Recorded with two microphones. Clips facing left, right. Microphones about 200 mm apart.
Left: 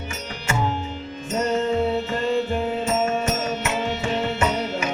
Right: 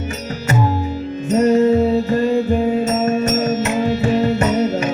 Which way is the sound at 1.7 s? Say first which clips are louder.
Right 7 dB; 40° right (ahead or behind).